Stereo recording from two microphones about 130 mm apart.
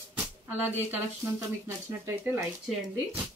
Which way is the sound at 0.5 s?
15° right (ahead or behind).